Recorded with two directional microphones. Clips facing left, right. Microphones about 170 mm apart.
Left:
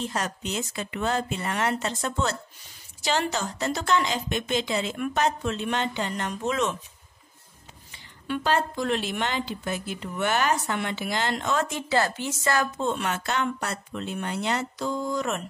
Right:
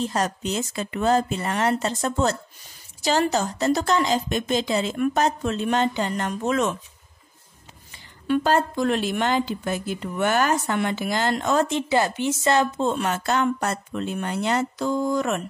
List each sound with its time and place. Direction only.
0.0 s speech: 40° right (ahead or behind)
7.9 s speech: 45° right (ahead or behind)
11.6 s speech: 20° right (ahead or behind); by 15.4 s 55° right (ahead or behind)